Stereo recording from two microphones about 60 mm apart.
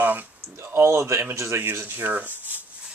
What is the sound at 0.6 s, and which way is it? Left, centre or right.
Speech, right.